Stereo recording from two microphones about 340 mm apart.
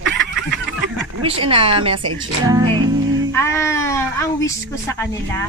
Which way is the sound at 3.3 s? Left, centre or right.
Centre.